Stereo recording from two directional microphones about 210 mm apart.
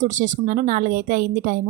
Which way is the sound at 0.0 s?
35° right (ahead or behind).